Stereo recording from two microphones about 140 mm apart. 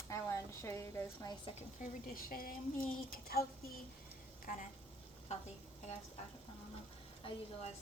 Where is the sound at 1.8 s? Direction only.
90° left.